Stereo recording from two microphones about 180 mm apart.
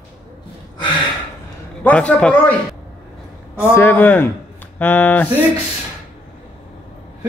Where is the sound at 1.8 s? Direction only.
10° left (ahead or behind).